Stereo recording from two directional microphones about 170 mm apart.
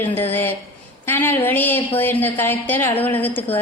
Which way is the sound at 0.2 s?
15° left (ahead or behind).